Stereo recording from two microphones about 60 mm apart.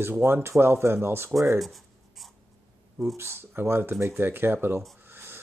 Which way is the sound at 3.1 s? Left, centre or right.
Right.